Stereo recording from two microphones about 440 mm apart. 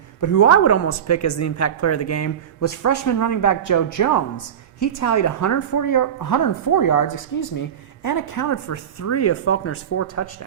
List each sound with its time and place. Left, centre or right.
0.2 s a woman's voice: left